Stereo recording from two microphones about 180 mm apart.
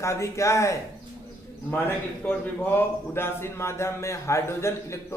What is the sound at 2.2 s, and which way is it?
A man's voice, 10° left (ahead or behind).